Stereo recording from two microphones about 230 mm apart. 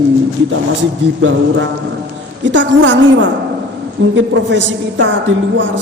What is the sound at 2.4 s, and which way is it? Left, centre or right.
A woman's voice, right.